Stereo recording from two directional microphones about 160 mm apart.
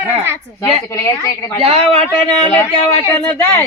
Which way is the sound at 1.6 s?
40° right (ahead or behind).